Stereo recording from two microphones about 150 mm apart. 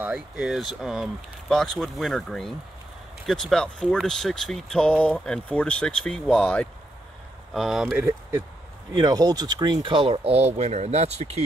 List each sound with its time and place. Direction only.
0.0 s speech: 5° right (ahead or behind)
7.5 s speech: centre (ahead or behind)
8.0 s speech: 20° right (ahead or behind); by 11.4 s 45° right (ahead or behind)